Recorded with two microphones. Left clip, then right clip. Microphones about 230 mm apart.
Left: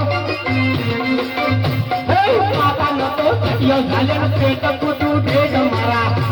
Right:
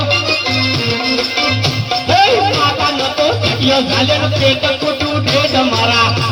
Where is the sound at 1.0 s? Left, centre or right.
Right.